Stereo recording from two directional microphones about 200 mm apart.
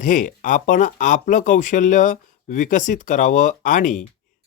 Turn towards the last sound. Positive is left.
turn(degrees=40)  # may be behind; listen again after turning